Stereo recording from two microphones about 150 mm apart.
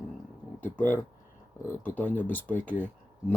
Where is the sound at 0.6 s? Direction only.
10° left (ahead or behind).